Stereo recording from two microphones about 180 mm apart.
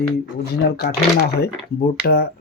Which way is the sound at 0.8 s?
65° left (ahead or behind).